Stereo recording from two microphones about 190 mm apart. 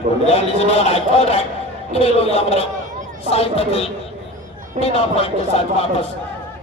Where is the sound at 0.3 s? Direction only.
30° left (ahead or behind).